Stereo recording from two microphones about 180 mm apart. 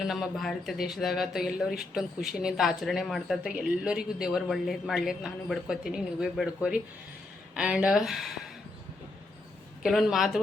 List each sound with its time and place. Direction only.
0.0 s speech: centre (ahead or behind)
9.8 s speech: centre (ahead or behind)